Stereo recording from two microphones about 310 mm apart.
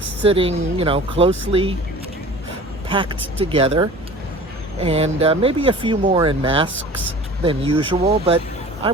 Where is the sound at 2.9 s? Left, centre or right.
Centre.